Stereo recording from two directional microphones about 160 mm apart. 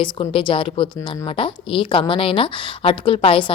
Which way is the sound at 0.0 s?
30° left (ahead or behind).